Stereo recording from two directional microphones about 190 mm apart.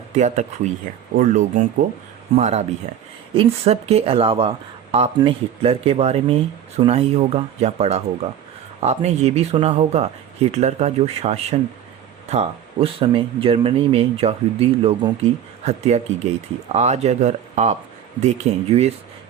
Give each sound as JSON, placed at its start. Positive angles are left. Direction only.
{"t": 0.1, "sound": "speech", "side_deg": -40}